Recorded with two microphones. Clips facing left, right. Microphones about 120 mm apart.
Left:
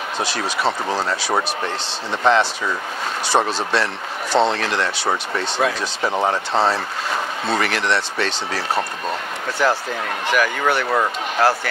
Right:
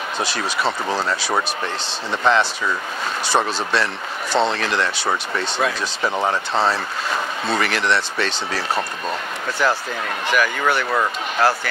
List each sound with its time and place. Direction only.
1.3 s speech: 30° left (ahead or behind)
3.3 s speech: 30° left (ahead or behind)
4.7 s speech: 35° left (ahead or behind)
7.7 s speech: 55° left (ahead or behind)